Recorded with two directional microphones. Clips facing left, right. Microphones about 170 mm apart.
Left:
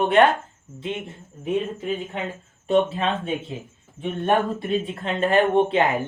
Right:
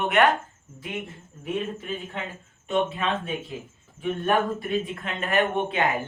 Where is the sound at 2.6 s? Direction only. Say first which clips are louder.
Left 5 dB; 35° left (ahead or behind).